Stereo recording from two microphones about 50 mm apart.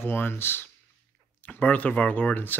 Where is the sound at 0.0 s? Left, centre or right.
Left.